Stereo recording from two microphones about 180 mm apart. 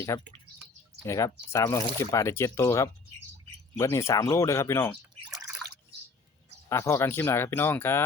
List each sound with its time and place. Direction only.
0.1 s speech: 20° left (ahead or behind)
6.7 s speech: 15° left (ahead or behind)